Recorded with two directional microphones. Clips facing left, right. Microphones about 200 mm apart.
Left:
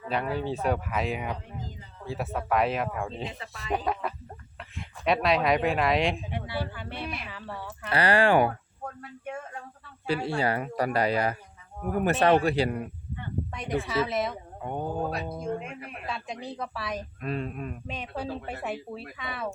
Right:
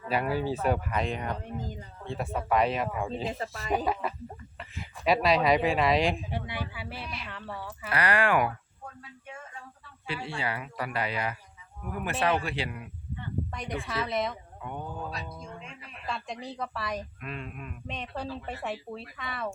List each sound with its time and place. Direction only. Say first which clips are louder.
0.1 s speech: right 1 dB; 5° right (ahead or behind)
7.9 s speech: left 4 dB; 30° left (ahead or behind)
9.2 s a sound: left 9 dB; 55° left (ahead or behind)
10.1 s a man's voice: left 7 dB; 40° left (ahead or behind)
13.5 s speech: left 5 dB; centre (ahead or behind)
14.6 s speech: left 7 dB; 35° left (ahead or behind)
15.1 s speech: left 9 dB; 55° left (ahead or behind)
16.0 s speech: even; centre (ahead or behind)
17.2 s speech: left 7 dB; 40° left (ahead or behind)
17.8 s speech: right 1 dB; centre (ahead or behind)